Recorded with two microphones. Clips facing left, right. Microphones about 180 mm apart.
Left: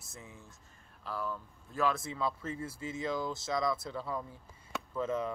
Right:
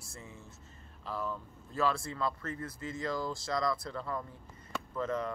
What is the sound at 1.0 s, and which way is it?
Speech, 10° right (ahead or behind).